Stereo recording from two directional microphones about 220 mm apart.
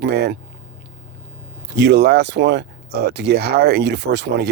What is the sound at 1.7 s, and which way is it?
Speech, 50° right (ahead or behind).